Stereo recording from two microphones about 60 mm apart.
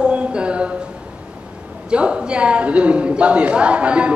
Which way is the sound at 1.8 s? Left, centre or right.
Centre.